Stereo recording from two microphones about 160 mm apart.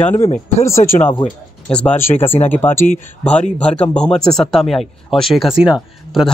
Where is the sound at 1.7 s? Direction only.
5° left (ahead or behind).